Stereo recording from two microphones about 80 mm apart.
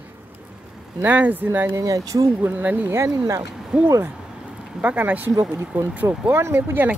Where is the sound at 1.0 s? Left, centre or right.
Right.